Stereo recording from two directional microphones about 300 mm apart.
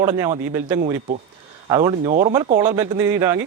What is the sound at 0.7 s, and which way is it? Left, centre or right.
Speech, right.